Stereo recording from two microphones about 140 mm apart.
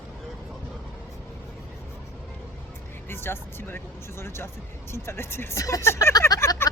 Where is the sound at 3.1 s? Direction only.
15° left (ahead or behind).